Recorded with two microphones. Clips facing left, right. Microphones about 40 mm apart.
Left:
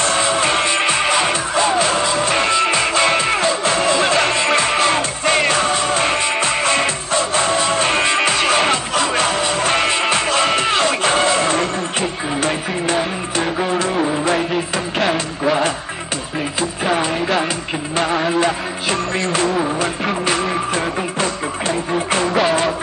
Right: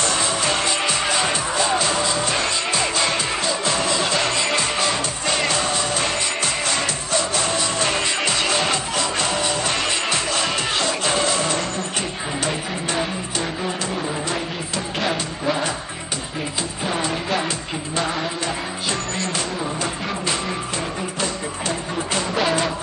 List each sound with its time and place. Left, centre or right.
0.0 s music: left
17.9 s music: left